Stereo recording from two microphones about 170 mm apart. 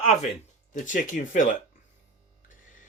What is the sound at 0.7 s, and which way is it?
Speech, 50° left (ahead or behind).